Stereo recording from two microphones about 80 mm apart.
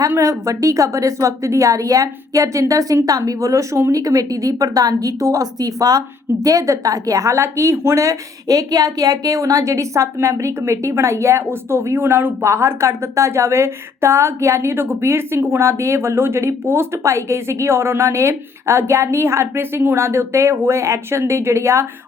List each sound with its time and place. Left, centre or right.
0.2 s a woman's voice: right